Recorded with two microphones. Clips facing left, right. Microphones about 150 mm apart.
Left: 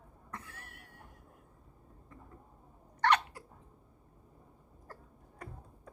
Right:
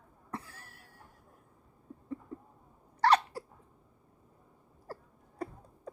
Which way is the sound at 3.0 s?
35° right (ahead or behind).